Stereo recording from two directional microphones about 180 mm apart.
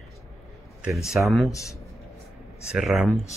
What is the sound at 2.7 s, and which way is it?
Speech, 5° right (ahead or behind).